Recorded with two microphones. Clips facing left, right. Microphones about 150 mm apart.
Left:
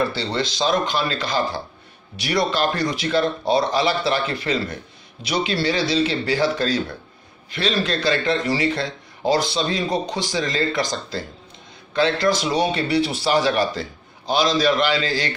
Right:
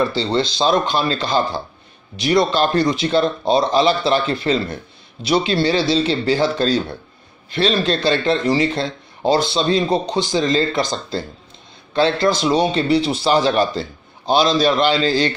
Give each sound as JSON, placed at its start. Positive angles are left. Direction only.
{"t": 0.0, "sound": "a man's voice", "side_deg": -20}